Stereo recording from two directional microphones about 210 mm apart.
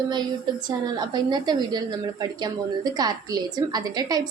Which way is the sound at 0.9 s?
20° right (ahead or behind).